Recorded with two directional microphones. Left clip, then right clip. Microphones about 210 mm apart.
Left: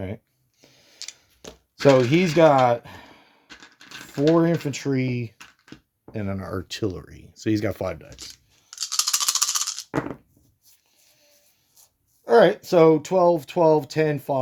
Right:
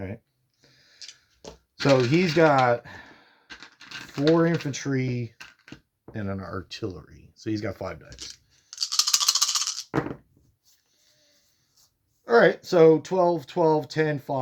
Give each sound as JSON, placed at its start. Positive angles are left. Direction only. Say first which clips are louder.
{"t": 0.6, "sound": "tick-tock", "louder": "left 6 dB", "side_deg": 40}
{"t": 1.8, "sound": "speech", "louder": "left 4 dB", "side_deg": 30}
{"t": 3.4, "sound": "a sound", "louder": "right 2 dB", "side_deg": -10}
{"t": 4.3, "sound": "speech", "louder": "left 1 dB", "side_deg": 25}
{"t": 5.4, "sound": "a sound", "louder": "right 1 dB", "side_deg": -10}
{"t": 6.1, "sound": "speech", "louder": "left 3 dB", "side_deg": 35}
{"t": 8.7, "sound": "toothbrush", "louder": "right 1 dB", "side_deg": 5}
{"t": 12.2, "sound": "speech", "louder": "left 3 dB", "side_deg": 30}